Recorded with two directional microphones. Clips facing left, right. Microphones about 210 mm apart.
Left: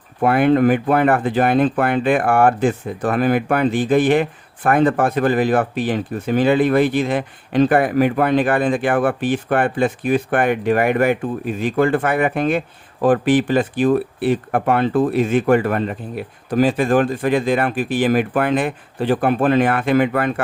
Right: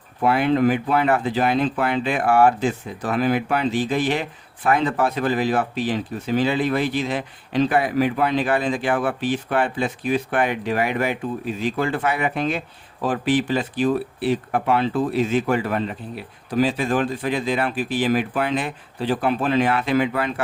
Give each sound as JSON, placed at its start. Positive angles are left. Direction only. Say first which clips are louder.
{"t": 0.2, "sound": "speech", "louder": "left 4 dB", "side_deg": 55}